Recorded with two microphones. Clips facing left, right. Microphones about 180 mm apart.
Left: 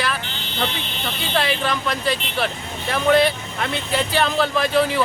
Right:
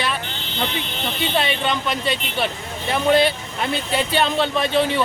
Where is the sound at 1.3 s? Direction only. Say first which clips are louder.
Left 1 dB; 25° right (ahead or behind).